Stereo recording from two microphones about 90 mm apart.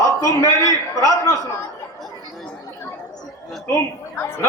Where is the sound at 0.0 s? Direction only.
40° left (ahead or behind).